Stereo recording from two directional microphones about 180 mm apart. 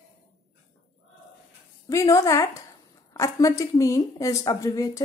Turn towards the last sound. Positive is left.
turn(degrees=20)  # may be behind; listen again after turning